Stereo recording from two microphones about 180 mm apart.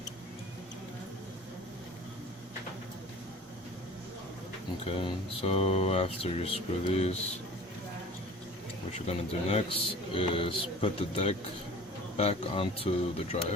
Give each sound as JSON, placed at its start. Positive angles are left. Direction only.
{"t": 4.9, "sound": "speech", "side_deg": 30}
{"t": 9.0, "sound": "speech", "side_deg": 35}